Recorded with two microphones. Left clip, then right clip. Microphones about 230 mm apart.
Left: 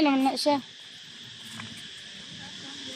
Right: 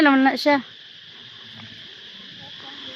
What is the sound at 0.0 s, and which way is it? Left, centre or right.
Speech, right.